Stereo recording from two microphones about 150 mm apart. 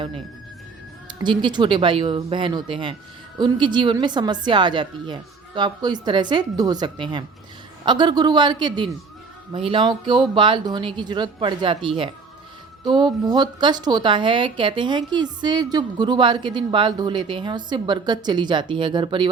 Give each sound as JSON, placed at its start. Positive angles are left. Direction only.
{"t": 1.2, "sound": "a woman's voice", "side_deg": -30}